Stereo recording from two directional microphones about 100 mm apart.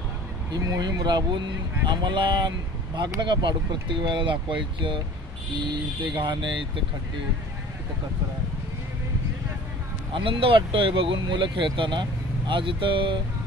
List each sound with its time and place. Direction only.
0.5 s speech: 40° right (ahead or behind); by 6.8 s 55° right (ahead or behind)
10.1 s speech: 55° right (ahead or behind)